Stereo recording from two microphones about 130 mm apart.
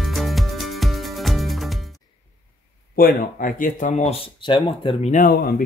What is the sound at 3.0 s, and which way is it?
Speech, 90° left.